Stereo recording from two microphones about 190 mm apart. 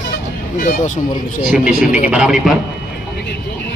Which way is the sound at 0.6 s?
45° left (ahead or behind).